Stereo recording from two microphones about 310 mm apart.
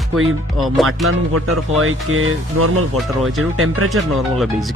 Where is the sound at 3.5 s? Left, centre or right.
Right.